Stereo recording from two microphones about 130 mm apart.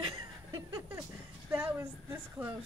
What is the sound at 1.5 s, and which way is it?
A woman's voice, 15° right (ahead or behind).